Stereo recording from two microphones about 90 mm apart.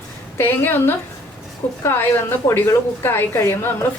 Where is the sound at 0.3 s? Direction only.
25° left (ahead or behind).